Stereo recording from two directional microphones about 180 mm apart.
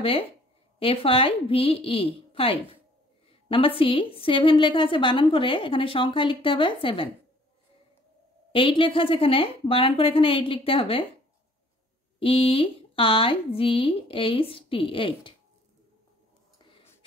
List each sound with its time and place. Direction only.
0.0 s a woman's voice: 30° left (ahead or behind)
8.5 s speech: 30° left (ahead or behind)
12.2 s speech: 30° left (ahead or behind)